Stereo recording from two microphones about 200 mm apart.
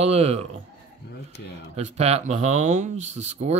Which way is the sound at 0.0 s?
30° right (ahead or behind).